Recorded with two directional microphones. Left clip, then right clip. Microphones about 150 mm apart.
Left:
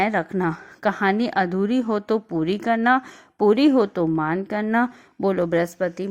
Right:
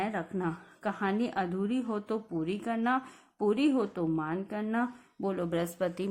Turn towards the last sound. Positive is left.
turn(degrees=30)  # may be behind; listen again after turning